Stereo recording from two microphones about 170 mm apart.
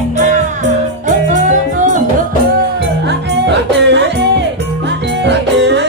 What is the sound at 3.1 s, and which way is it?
Music, 90° right.